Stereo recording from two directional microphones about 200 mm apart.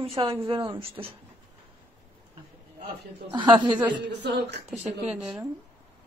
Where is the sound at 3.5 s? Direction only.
25° right (ahead or behind).